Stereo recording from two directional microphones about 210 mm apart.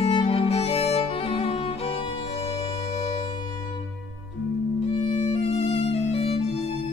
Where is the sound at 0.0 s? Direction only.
25° left (ahead or behind).